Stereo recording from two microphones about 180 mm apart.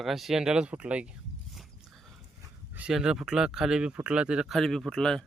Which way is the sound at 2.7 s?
5° right (ahead or behind).